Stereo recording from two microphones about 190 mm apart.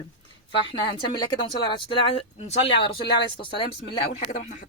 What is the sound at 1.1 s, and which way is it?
Speech, 25° left (ahead or behind).